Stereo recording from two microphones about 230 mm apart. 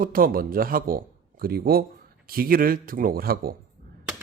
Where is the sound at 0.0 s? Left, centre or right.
Right.